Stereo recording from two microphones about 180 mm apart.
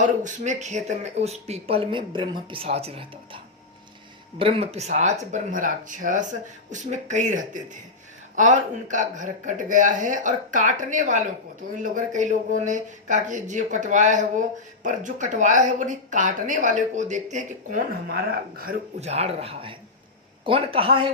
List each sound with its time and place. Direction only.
0.0 s a woman's voice: 45° right (ahead or behind)
18.9 s a woman's voice: 35° right (ahead or behind)